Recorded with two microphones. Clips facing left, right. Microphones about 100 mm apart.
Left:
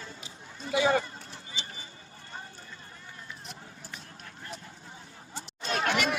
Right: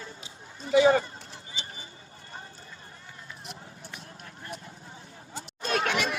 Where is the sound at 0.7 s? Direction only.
30° right (ahead or behind).